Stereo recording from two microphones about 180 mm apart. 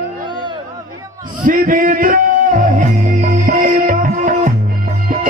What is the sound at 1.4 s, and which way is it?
Music, 50° right (ahead or behind).